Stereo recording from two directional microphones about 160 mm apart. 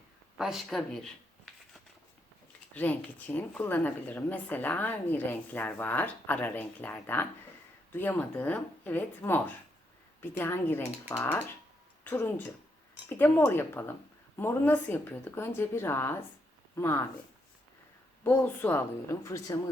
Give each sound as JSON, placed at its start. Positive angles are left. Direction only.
{"t": 0.3, "sound": "speech", "side_deg": 0}
{"t": 2.7, "sound": "a woman's voice", "side_deg": 10}
{"t": 18.2, "sound": "a woman's voice", "side_deg": 15}